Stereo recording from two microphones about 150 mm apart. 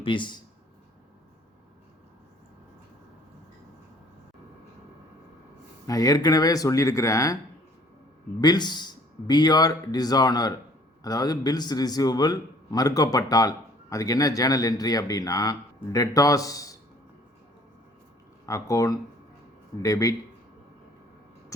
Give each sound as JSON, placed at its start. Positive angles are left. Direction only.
{"t": 0.0, "sound": "speech", "side_deg": 35}
{"t": 5.9, "sound": "a man's voice", "side_deg": 25}
{"t": 8.4, "sound": "a man's voice", "side_deg": 30}
{"t": 18.4, "sound": "a man's voice", "side_deg": 20}